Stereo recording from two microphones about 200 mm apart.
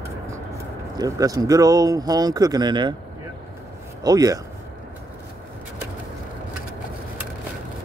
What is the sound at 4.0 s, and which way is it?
Speech, 20° right (ahead or behind).